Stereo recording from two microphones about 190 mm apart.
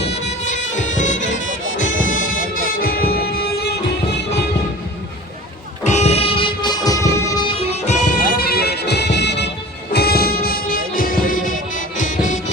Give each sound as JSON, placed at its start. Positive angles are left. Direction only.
{"t": 0.0, "sound": "music", "side_deg": 35}
{"t": 5.8, "sound": "vehicle", "side_deg": 35}
{"t": 7.9, "sound": "music", "side_deg": 50}